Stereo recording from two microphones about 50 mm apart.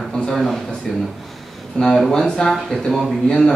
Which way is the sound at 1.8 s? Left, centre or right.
Centre.